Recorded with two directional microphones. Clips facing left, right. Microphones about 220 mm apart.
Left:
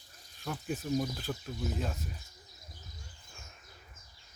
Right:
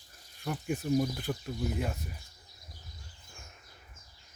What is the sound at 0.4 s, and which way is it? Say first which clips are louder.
Speech: right 3 dB; 10° right (ahead or behind).